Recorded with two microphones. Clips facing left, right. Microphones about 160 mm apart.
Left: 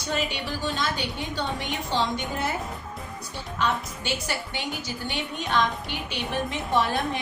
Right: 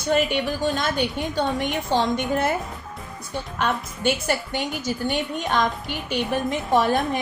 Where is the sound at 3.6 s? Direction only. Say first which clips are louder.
Right 2 dB; 55° right (ahead or behind).